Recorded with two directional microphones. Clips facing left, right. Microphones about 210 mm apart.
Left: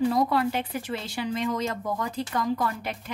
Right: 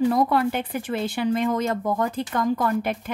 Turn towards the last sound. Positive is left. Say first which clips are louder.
# right 6 dB
turn(degrees=-55)  # may be behind; listen again after turning